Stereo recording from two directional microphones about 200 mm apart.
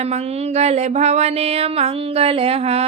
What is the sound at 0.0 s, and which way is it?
A woman's voice, 30° right (ahead or behind).